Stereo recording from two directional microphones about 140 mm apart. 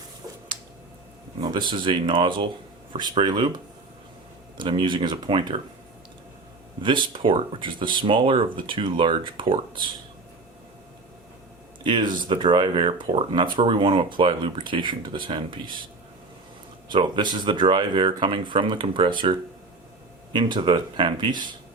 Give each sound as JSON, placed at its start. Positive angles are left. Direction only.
{"t": 1.5, "sound": "speech", "side_deg": -35}
{"t": 6.8, "sound": "speech", "side_deg": -35}
{"t": 11.8, "sound": "speech", "side_deg": -35}
{"t": 16.9, "sound": "speech", "side_deg": -35}